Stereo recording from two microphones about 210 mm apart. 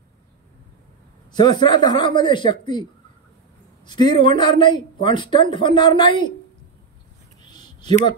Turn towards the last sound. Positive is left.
turn(degrees=20)  # may be behind; listen again after turning